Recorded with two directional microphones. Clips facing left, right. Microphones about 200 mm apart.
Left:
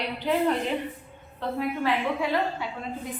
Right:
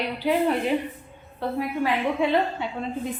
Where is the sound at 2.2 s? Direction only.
25° right (ahead or behind).